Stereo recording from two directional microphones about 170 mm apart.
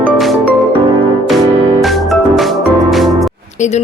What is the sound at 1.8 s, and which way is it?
Music, centre (ahead or behind).